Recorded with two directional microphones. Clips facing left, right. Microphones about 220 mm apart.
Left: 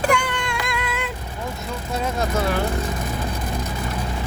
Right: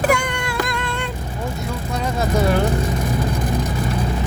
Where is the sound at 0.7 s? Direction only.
5° left (ahead or behind).